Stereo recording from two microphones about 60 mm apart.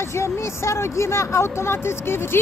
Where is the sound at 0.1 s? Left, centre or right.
Left.